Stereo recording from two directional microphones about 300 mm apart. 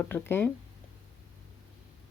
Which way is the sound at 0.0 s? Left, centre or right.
Centre.